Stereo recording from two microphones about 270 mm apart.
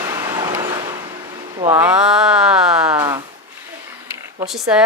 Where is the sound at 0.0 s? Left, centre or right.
Centre.